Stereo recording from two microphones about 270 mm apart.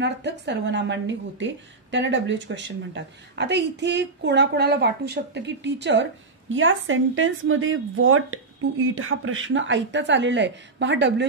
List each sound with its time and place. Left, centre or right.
0.0 s a woman's voice: right